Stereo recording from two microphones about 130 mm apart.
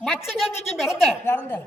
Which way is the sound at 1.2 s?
15° left (ahead or behind).